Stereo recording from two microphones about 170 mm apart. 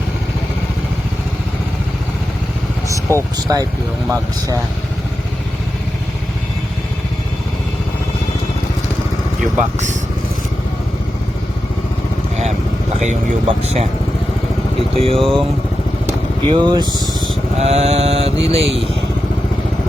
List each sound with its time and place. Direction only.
2.9 s speech: 15° right (ahead or behind)
9.4 s speech: 50° right (ahead or behind)
13.6 s mantra: 40° right (ahead or behind)
14.9 s mantra: 35° right (ahead or behind)
15.2 s speech: centre (ahead or behind)
16.5 s speech: 25° right (ahead or behind)
17.6 s mantra: 40° right (ahead or behind)